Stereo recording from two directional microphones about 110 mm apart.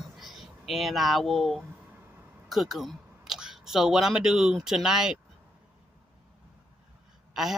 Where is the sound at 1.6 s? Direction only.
15° right (ahead or behind).